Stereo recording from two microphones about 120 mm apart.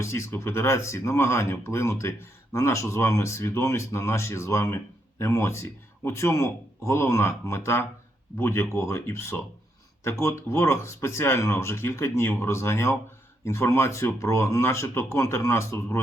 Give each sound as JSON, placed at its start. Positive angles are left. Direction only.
{"t": 0.0, "sound": "speech", "side_deg": 25}